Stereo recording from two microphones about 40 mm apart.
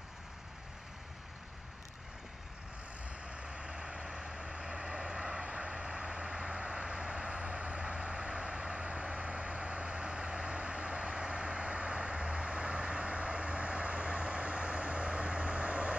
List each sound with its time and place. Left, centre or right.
3.3 s vehicle: right